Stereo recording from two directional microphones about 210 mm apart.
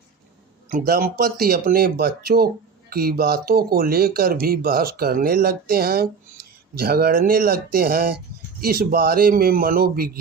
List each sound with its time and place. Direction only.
0.7 s speech: 40° right (ahead or behind)